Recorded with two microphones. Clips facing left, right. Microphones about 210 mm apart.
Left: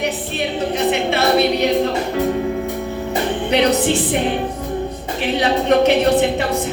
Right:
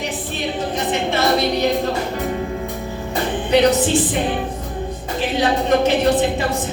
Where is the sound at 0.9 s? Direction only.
65° left (ahead or behind).